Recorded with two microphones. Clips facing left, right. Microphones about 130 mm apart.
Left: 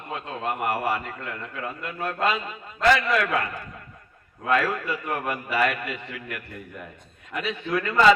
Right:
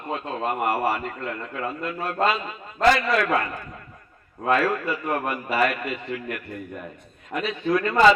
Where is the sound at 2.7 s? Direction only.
40° right (ahead or behind).